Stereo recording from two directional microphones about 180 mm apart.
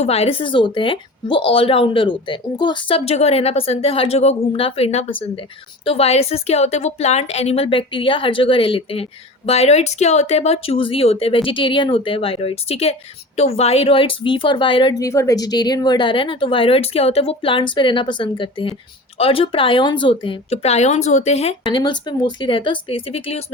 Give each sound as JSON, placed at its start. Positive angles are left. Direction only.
{"t": 0.0, "sound": "speech", "side_deg": 35}